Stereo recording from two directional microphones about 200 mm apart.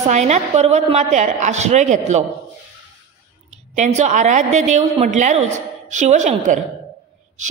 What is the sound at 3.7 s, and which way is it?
A woman's voice, 35° right (ahead or behind).